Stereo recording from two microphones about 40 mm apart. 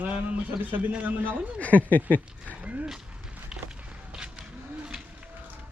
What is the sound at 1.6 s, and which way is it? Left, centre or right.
Speech, left.